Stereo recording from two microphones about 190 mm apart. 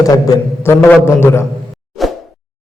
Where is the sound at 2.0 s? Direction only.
Centre (ahead or behind).